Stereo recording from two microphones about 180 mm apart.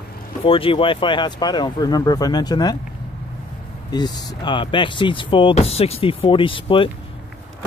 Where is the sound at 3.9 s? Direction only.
25° left (ahead or behind).